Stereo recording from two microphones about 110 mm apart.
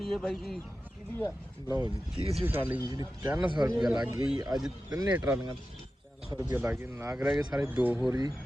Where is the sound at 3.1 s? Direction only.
30° right (ahead or behind).